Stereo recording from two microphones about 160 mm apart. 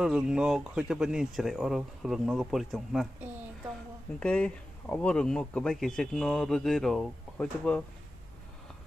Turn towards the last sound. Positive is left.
turn(degrees=5)  # may be behind; listen again after turning